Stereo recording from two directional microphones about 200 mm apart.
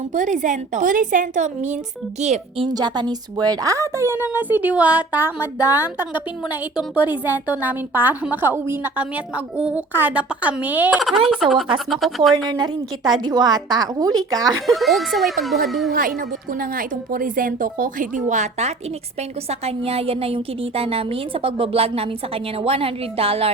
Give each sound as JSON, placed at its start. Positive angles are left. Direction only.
{"t": 0.1, "sound": "a woman's voice", "side_deg": -40}
{"t": 2.6, "sound": "a woman's voice", "side_deg": -20}
{"t": 12.5, "sound": "a woman's voice", "side_deg": -20}
{"t": 14.7, "sound": "speech", "side_deg": 0}
{"t": 15.9, "sound": "a woman's voice", "side_deg": -45}